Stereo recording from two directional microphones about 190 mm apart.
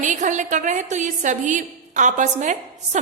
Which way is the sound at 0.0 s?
40° right (ahead or behind).